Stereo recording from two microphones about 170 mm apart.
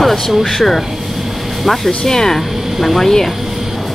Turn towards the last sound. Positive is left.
turn(degrees=0)  # may be behind; listen again after turning